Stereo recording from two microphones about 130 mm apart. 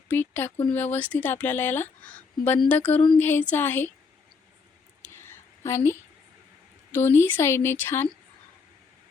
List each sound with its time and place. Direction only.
0.1 s speech: 15° left (ahead or behind)
5.0 s a sound: 20° left (ahead or behind)
6.9 s speech: 20° left (ahead or behind)